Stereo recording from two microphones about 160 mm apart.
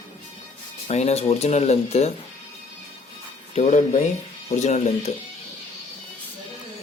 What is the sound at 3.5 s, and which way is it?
Speech, 45° left (ahead or behind).